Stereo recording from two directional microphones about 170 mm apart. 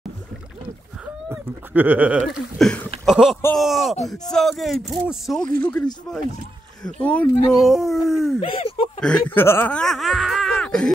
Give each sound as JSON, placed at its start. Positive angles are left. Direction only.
{"t": 1.0, "sound": "a sound", "side_deg": -10}
{"t": 3.1, "sound": "speech", "side_deg": 0}
{"t": 8.4, "sound": "speech", "side_deg": 35}
{"t": 9.0, "sound": "speech", "side_deg": 10}